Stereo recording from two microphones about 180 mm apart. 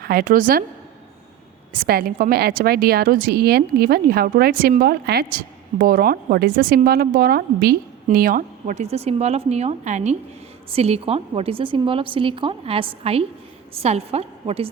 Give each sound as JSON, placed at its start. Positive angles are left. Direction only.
{"t": 0.0, "sound": "a woman's voice", "side_deg": -55}
{"t": 1.7, "sound": "a woman's voice", "side_deg": -55}